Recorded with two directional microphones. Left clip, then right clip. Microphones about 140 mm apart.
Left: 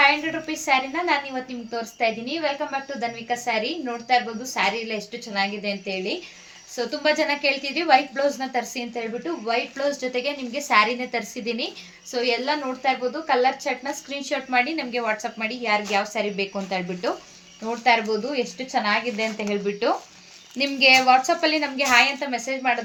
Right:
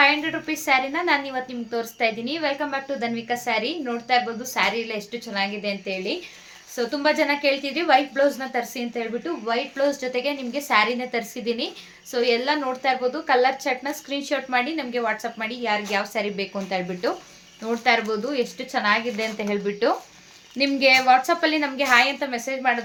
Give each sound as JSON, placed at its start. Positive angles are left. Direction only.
{"t": 0.0, "sound": "a woman's voice", "side_deg": -25}
{"t": 18.3, "sound": "a woman's voice", "side_deg": -30}